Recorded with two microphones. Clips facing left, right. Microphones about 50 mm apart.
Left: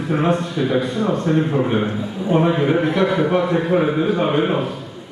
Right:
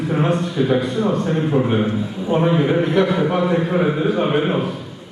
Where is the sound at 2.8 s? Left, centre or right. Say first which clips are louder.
Right 1 dB; left.